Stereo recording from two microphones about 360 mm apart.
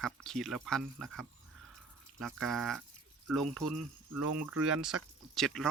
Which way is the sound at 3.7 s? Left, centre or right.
Right.